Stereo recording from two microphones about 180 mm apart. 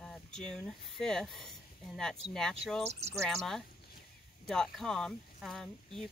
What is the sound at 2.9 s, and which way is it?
Speech, 35° right (ahead or behind).